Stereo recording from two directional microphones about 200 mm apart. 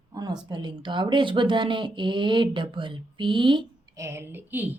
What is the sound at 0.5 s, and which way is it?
Speech, 25° right (ahead or behind).